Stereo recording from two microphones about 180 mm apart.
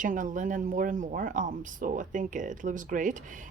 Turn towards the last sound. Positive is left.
turn(degrees=-45)  # may be behind; listen again after turning